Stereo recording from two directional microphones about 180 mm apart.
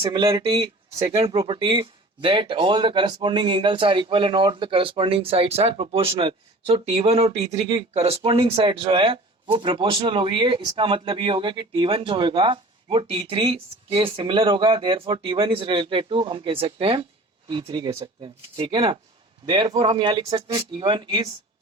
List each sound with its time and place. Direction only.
0.0 s speech: 30° right (ahead or behind)